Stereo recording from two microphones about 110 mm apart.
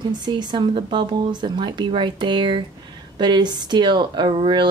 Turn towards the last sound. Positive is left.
turn(degrees=-45)  # may be behind; listen again after turning